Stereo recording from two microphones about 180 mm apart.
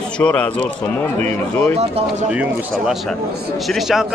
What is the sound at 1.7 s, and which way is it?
Speech, 35° right (ahead or behind).